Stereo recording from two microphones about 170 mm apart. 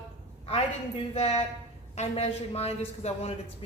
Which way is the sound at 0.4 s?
35° left (ahead or behind).